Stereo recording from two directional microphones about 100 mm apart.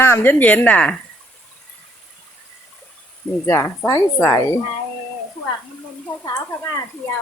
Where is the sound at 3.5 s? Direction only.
25° left (ahead or behind).